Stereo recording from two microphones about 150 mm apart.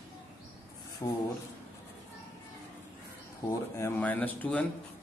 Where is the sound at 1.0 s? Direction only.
20° left (ahead or behind).